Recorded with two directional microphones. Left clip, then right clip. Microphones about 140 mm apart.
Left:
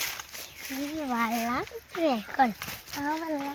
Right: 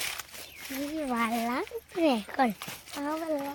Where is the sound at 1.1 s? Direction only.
40° right (ahead or behind).